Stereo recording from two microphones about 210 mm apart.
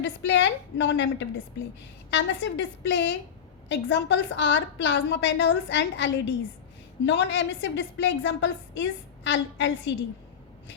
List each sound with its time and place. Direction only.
0.0 s a woman's voice: 60° left (ahead or behind)